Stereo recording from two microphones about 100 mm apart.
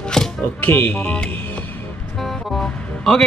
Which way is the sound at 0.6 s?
20° left (ahead or behind).